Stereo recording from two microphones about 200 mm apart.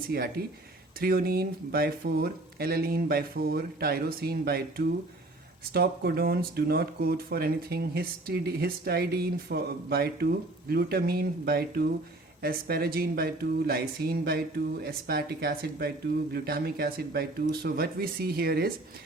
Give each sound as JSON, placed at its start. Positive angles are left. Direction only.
{"t": 0.1, "sound": "speech", "side_deg": -50}
{"t": 5.7, "sound": "speech", "side_deg": -50}